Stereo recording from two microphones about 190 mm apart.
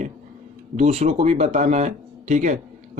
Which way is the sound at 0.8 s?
35° right (ahead or behind).